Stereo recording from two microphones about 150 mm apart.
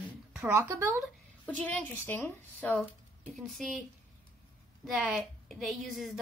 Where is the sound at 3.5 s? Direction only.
Centre (ahead or behind).